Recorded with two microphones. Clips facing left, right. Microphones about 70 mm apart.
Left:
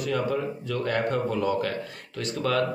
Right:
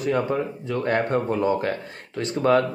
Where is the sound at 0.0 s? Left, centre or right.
Right.